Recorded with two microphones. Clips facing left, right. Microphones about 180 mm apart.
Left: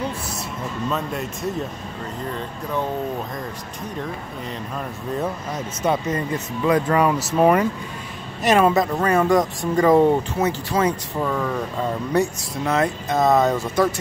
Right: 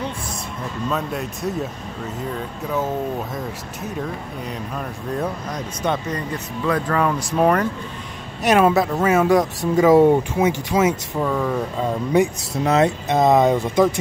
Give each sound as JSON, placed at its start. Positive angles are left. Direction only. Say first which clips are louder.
{"t": 0.8, "sound": "speech", "louder": "right 2 dB", "side_deg": 0}
{"t": 4.7, "sound": "speech", "louder": "even", "side_deg": 5}
{"t": 6.0, "sound": "speech", "louder": "left 2 dB", "side_deg": 20}